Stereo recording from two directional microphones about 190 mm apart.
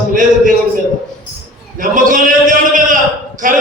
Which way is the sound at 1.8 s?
45° right (ahead or behind).